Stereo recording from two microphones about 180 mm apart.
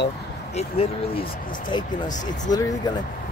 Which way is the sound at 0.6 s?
35° left (ahead or behind).